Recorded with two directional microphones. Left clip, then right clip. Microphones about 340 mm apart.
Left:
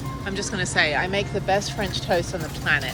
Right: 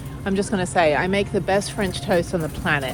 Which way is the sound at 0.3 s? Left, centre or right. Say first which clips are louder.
Right 5 dB; centre.